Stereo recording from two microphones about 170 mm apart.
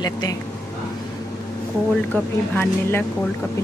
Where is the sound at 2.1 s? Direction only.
10° left (ahead or behind).